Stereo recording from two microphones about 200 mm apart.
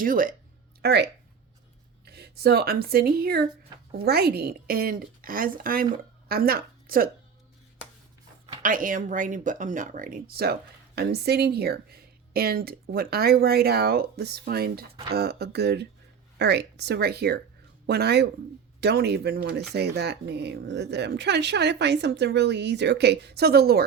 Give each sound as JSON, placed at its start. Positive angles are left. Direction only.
{"t": 0.0, "sound": "speech", "side_deg": -45}
{"t": 0.8, "sound": "speech", "side_deg": -55}
{"t": 8.6, "sound": "speech", "side_deg": -40}